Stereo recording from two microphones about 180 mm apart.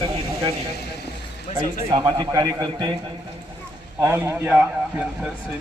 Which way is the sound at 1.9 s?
20° right (ahead or behind).